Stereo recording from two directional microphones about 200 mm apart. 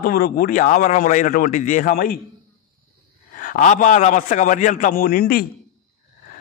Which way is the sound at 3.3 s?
40° left (ahead or behind).